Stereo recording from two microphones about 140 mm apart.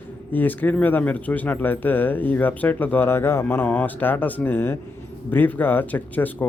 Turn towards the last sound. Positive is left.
turn(degrees=10)  # may be behind; listen again after turning